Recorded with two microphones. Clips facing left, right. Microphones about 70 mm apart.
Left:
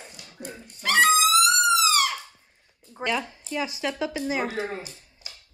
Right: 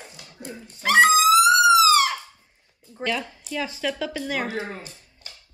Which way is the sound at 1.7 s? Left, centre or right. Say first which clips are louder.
Right 6 dB; centre.